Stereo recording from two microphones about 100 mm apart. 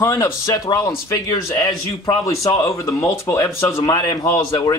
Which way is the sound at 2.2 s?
30° left (ahead or behind).